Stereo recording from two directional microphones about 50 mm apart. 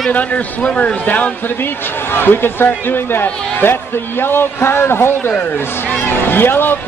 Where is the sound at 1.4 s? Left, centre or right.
Left.